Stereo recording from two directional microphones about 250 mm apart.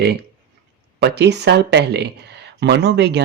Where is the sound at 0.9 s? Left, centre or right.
Right.